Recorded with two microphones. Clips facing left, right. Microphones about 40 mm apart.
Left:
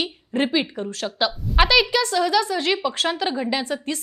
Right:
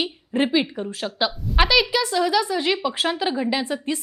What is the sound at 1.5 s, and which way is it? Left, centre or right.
A woman's voice, centre.